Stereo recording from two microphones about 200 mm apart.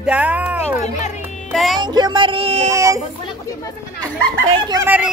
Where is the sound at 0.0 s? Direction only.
5° right (ahead or behind).